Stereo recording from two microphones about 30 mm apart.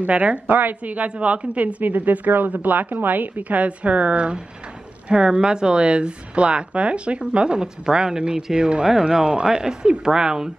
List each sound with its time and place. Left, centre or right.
0.0 s a woman's voice: right
0.5 s a woman's voice: right
1.2 s a woman's voice: right
1.8 s a woman's voice: right
7.6 s speech: right
8.8 s speech: centre